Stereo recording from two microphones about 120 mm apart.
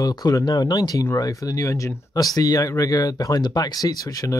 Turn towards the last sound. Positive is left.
turn(degrees=30)  # may be behind; listen again after turning